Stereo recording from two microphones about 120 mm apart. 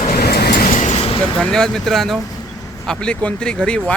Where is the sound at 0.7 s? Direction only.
80° left.